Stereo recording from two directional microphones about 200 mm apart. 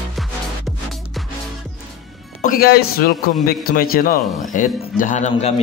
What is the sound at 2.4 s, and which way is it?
A man's voice, 45° left (ahead or behind).